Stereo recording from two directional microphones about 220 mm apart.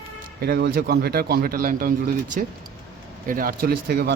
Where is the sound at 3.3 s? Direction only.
40° right (ahead or behind).